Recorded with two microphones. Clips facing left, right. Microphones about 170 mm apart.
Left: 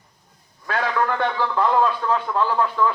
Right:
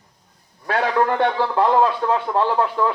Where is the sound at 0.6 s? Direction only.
30° right (ahead or behind).